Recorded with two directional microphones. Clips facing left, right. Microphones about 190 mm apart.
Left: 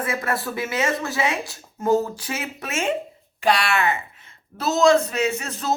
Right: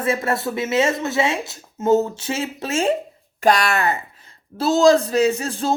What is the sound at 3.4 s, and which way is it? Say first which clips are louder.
Speech: right 3 dB; 45° right (ahead or behind).